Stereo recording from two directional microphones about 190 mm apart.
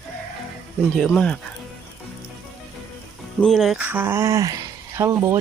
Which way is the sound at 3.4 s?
Centre (ahead or behind).